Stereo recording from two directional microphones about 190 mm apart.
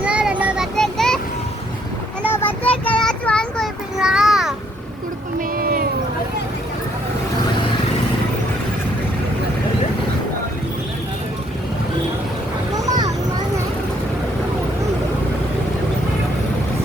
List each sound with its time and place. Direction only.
0.0 s child singing: 5° right (ahead or behind)
2.3 s child singing: 10° left (ahead or behind)
5.5 s a sound: 50° right (ahead or behind)
12.7 s vehicle: 20° right (ahead or behind)